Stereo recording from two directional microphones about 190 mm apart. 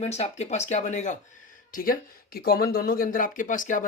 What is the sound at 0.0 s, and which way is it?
Speech, 35° left (ahead or behind).